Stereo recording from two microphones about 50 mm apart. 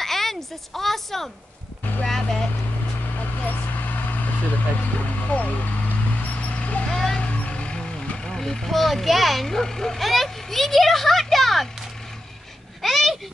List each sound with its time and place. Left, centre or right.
0.0 s a woman's voice: centre
2.0 s music: centre
3.4 s vehicle: left
4.8 s speech: left
6.5 s vehicle: left
6.9 s vehicle: centre
7.2 s speech: left; by 11.7 s centre
12.8 s a sound: centre